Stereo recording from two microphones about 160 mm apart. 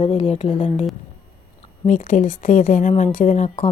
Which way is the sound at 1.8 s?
55° left (ahead or behind).